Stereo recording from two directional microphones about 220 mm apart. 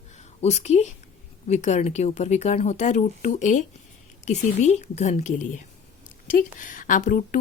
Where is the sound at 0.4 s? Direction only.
30° left (ahead or behind).